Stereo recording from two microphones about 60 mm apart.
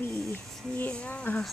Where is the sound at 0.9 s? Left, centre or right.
Centre.